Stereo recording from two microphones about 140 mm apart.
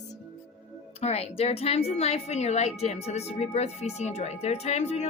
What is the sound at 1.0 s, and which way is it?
A woman's voice, 45° left (ahead or behind).